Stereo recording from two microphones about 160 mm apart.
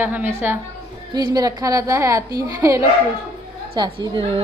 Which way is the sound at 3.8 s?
25° right (ahead or behind).